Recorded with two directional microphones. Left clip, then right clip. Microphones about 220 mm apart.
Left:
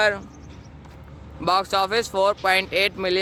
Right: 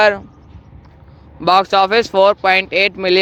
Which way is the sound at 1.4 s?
25° right (ahead or behind).